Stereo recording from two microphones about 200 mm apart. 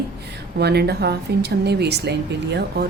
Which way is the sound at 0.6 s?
55° right (ahead or behind).